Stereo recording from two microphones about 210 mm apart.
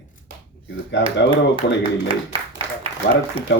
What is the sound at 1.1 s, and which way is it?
Speech, 55° left (ahead or behind).